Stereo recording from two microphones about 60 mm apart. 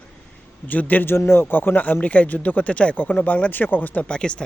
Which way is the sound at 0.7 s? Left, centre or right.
Left.